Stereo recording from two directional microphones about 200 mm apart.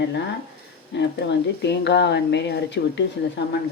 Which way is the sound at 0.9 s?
60° left (ahead or behind).